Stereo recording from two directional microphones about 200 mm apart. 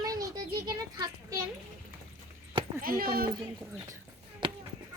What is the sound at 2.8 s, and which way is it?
Speech, 45° right (ahead or behind).